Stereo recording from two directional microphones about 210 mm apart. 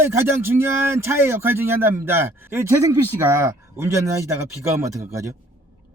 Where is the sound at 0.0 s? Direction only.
10° right (ahead or behind).